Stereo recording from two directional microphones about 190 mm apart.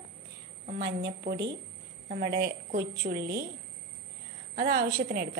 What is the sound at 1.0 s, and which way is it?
Speech, 65° right (ahead or behind).